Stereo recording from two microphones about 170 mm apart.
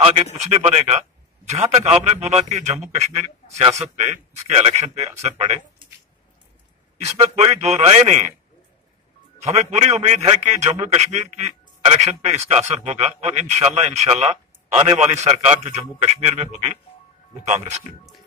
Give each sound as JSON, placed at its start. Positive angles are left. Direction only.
{"t": 0.0, "sound": "a man's voice", "side_deg": -35}
{"t": 7.3, "sound": "a man's voice", "side_deg": -40}
{"t": 9.4, "sound": "a man's voice", "side_deg": -40}